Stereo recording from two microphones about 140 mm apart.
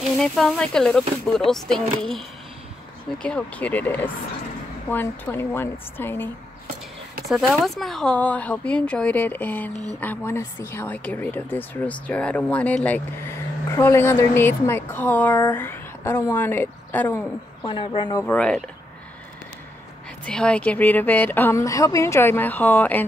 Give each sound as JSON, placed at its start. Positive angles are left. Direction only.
{"t": 0.2, "sound": "speech", "side_deg": 5}
{"t": 7.2, "sound": "speech", "side_deg": 0}
{"t": 17.6, "sound": "speech", "side_deg": 35}
{"t": 18.2, "sound": "speech", "side_deg": 5}
{"t": 20.2, "sound": "speech", "side_deg": 5}